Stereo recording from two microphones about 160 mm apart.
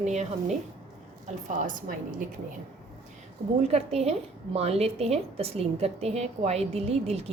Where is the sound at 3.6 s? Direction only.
40° right (ahead or behind).